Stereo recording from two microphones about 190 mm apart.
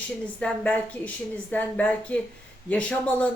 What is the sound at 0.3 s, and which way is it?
A woman's voice, 5° left (ahead or behind).